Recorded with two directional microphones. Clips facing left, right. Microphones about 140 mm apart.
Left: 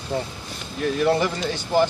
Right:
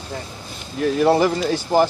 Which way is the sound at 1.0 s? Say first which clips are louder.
Right 5 dB; 35° right (ahead or behind).